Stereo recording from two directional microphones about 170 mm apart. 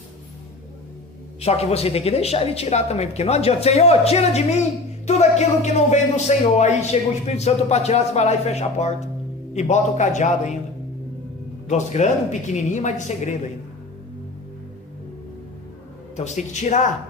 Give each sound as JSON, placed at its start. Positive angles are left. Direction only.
{"t": 1.4, "sound": "a woman's voice", "side_deg": 35}
{"t": 11.7, "sound": "a woman's voice", "side_deg": 45}
{"t": 16.1, "sound": "a woman's voice", "side_deg": 45}